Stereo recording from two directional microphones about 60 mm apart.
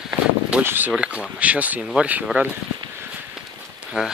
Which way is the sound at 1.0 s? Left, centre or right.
Right.